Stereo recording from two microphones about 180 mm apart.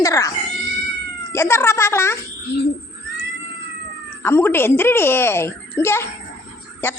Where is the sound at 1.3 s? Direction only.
15° left (ahead or behind).